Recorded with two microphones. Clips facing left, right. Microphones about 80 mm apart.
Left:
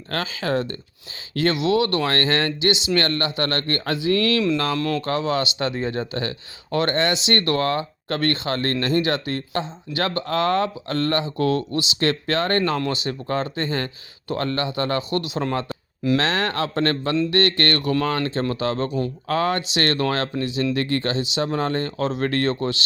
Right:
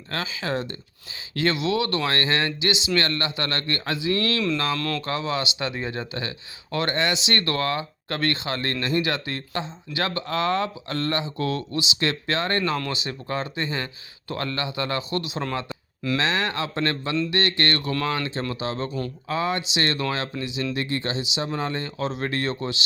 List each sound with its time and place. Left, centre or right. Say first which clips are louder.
0.1 s speech: left 4 dB; left
4.8 s speech: left 4 dB; left
5.0 s speech: left 4 dB; left
13.7 s speech: left 4 dB; centre
14.3 s speech: left 4 dB; left